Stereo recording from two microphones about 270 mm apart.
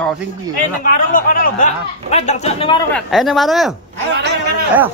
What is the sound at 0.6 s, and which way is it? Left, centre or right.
Speech, left.